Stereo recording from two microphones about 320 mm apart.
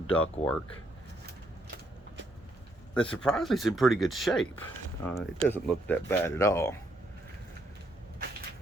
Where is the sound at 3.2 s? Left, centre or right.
Centre.